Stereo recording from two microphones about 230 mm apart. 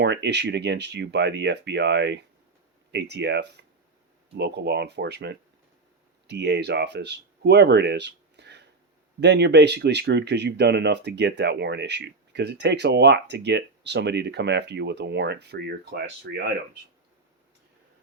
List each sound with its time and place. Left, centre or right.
0.0 s speech: right